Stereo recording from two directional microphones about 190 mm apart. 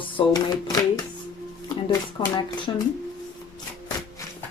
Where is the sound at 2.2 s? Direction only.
25° left (ahead or behind).